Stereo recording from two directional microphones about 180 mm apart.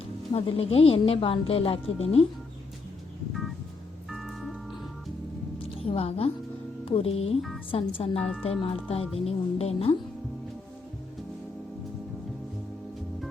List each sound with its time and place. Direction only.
0.3 s a woman's voice: 30° left (ahead or behind)
4.1 s music: centre (ahead or behind)
5.8 s a woman's voice: 30° left (ahead or behind)